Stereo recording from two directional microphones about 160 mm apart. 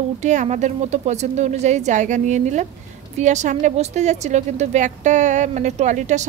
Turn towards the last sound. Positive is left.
turn(degrees=-50)  # may be behind; listen again after turning